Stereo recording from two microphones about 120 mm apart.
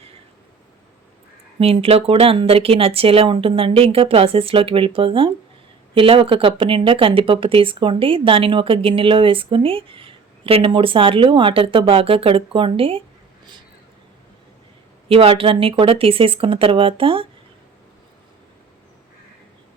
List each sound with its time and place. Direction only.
1.5 s speech: 55° right (ahead or behind)
15.1 s speech: 50° right (ahead or behind)